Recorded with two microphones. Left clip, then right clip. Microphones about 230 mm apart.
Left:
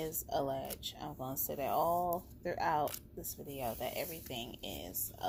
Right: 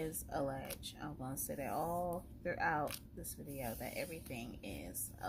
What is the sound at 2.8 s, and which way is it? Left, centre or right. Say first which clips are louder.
Speech: left 4 dB; left.